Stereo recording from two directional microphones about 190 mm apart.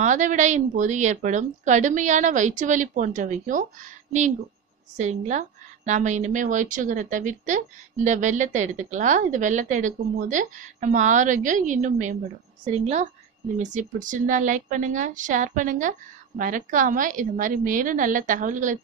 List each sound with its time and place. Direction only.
0.0 s a woman's voice: 40° right (ahead or behind)